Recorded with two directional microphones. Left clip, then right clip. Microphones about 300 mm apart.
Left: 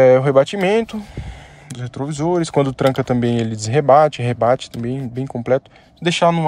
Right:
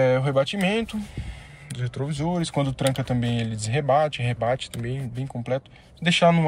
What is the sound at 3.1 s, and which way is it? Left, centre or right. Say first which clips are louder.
Speech: left 9 dB; left.